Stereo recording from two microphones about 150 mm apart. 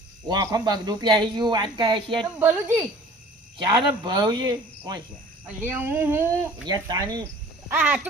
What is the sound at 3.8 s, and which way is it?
Speech, 30° right (ahead or behind).